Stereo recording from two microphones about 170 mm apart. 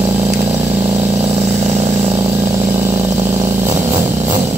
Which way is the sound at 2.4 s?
50° right (ahead or behind).